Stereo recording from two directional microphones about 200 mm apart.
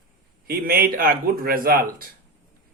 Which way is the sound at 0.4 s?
50° right (ahead or behind).